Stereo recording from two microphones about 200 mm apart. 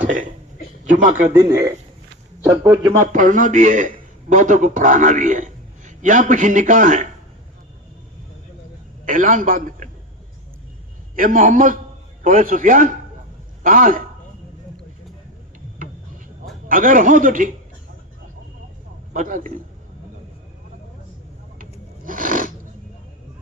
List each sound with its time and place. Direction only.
0.0 s speech: 40° right (ahead or behind)
1.3 s speech: 15° right (ahead or behind)
3.1 s a man's voice: 40° right (ahead or behind)
9.0 s a man's voice: 40° right (ahead or behind)
11.1 s a man's voice: 45° right (ahead or behind)
16.6 s speech: 40° right (ahead or behind)
19.1 s speech: 40° right (ahead or behind)
21.6 s rub: 45° right (ahead or behind)